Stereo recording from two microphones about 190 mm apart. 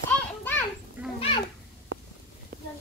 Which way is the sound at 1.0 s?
10° right (ahead or behind).